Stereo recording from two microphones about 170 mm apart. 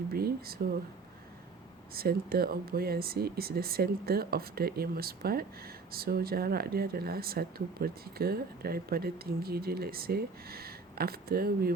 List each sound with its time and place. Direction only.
0.1 s speech: 65° right (ahead or behind)
1.9 s speech: 65° right (ahead or behind)